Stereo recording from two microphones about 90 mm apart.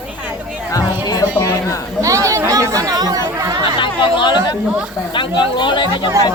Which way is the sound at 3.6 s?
70° left (ahead or behind).